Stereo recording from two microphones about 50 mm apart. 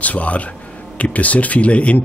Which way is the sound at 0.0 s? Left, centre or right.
Left.